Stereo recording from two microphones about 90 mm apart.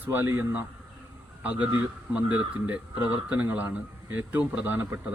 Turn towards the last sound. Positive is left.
turn(degrees=-25)  # may be behind; listen again after turning